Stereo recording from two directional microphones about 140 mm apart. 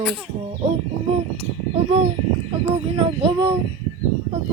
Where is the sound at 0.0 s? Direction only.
Centre (ahead or behind).